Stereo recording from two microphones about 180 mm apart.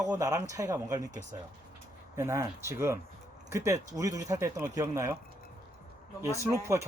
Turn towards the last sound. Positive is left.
turn(degrees=-15)  # may be behind; listen again after turning